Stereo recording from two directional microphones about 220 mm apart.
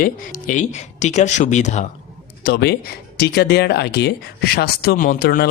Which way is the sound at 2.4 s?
45° left (ahead or behind).